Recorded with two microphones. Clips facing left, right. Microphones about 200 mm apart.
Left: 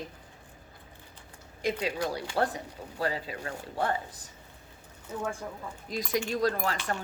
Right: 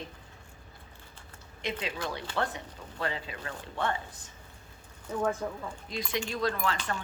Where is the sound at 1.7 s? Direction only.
40° left (ahead or behind).